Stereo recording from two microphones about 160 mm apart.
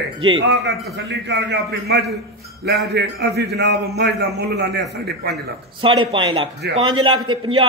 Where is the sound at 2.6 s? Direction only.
85° right.